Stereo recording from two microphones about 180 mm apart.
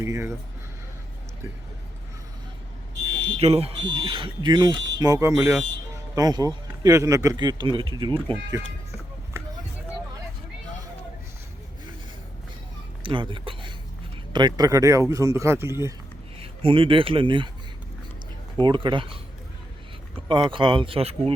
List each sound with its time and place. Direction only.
0.0 s speech: 15° right (ahead or behind)
3.2 s speech: 35° right (ahead or behind)
9.4 s a sound: 15° right (ahead or behind)
13.0 s speech: 25° right (ahead or behind)
16.4 s speech: 30° right (ahead or behind)
18.6 s speech: 25° right (ahead or behind)
20.2 s speech: 25° right (ahead or behind)